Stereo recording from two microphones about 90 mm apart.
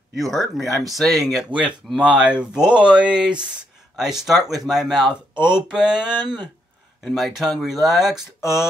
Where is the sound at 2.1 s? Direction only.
15° right (ahead or behind).